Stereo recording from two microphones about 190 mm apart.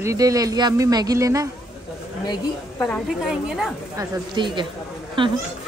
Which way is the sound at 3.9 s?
20° right (ahead or behind).